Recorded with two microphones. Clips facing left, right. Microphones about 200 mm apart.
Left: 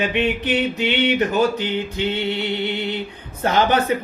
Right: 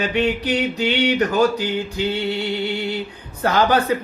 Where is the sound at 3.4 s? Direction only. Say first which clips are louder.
Right 1 dB; 20° left (ahead or behind).